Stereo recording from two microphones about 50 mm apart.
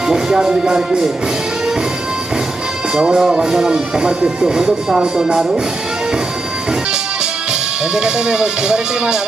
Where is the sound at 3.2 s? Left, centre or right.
Centre.